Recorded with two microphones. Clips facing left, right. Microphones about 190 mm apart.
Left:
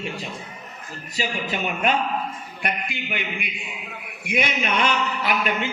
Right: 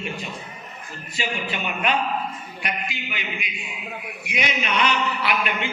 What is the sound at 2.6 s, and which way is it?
A man's voice, 55° left (ahead or behind).